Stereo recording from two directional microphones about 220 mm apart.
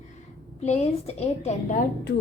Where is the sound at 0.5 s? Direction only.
30° left (ahead or behind).